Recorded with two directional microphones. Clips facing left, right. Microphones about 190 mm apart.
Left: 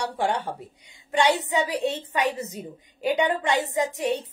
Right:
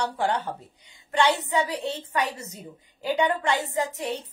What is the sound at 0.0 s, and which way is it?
Speech, 10° left (ahead or behind).